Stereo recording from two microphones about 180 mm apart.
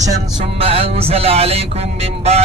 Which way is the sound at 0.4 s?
35° right (ahead or behind).